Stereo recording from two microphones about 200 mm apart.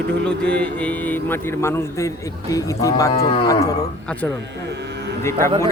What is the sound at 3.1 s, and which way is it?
Cattle, 30° left (ahead or behind).